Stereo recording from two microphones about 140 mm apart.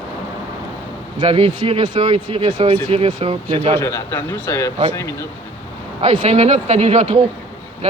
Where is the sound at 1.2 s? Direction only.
40° right (ahead or behind).